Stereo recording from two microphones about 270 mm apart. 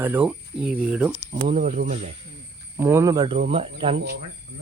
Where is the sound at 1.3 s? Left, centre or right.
Right.